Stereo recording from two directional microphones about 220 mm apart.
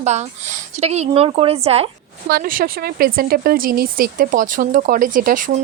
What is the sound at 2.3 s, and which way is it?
Speech, 40° right (ahead or behind).